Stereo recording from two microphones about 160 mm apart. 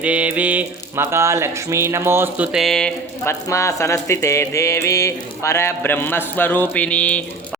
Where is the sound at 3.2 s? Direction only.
20° left (ahead or behind).